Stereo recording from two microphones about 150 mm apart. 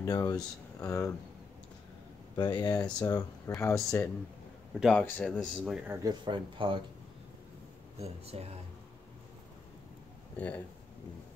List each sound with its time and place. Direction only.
0.0 s speech: 25° left (ahead or behind)
2.3 s speech: 30° left (ahead or behind)
4.7 s a man's voice: centre (ahead or behind)
6.0 s speech: 30° right (ahead or behind)
8.0 s speech: 45° right (ahead or behind)
10.3 s speech: 10° left (ahead or behind)